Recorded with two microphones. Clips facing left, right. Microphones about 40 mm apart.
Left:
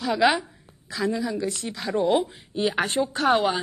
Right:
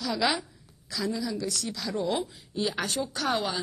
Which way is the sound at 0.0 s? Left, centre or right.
Left.